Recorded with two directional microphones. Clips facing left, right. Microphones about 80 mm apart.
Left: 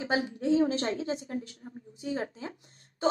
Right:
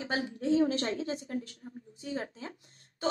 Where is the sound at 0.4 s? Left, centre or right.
Left.